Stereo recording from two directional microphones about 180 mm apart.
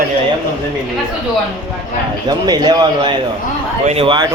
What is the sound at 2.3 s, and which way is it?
A man's voice, 25° right (ahead or behind).